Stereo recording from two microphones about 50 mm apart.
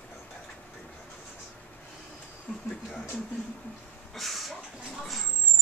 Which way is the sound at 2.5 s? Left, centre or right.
Centre.